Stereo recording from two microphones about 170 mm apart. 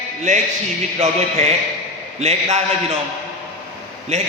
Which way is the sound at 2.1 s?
40° right (ahead or behind).